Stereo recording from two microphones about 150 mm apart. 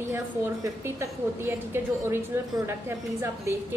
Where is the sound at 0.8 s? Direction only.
15° right (ahead or behind).